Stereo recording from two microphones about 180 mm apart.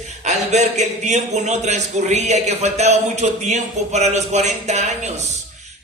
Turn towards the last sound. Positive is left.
turn(degrees=-40)  # may be behind; listen again after turning